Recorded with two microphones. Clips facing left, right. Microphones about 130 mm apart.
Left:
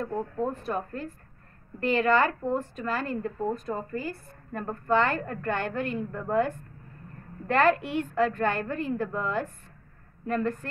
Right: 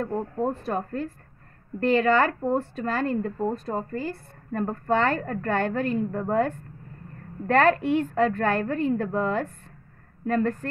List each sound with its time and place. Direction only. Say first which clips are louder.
0.0 s a woman's voice: right 3 dB; 35° right (ahead or behind)